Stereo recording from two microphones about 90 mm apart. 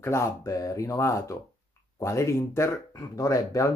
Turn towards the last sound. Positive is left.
turn(degrees=35)  # may be behind; listen again after turning